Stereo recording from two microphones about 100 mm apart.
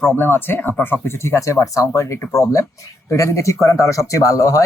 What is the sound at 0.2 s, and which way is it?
Speech, 20° left (ahead or behind).